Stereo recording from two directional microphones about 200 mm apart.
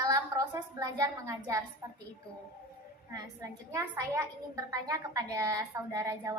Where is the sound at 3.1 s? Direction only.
20° right (ahead or behind).